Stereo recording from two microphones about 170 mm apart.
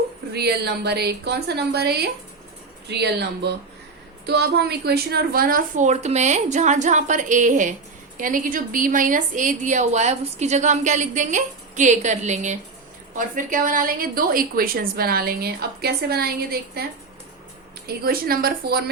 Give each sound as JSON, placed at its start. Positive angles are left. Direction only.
{"t": 0.3, "sound": "a woman's voice", "side_deg": -75}
{"t": 17.8, "sound": "a woman's voice", "side_deg": -60}